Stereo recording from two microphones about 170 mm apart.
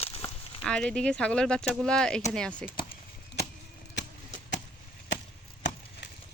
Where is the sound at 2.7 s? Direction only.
60° left (ahead or behind).